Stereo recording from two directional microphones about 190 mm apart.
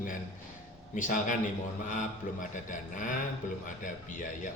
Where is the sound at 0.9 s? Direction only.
45° left (ahead or behind).